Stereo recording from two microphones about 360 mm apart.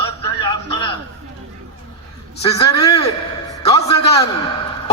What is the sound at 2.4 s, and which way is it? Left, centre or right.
Speech, centre.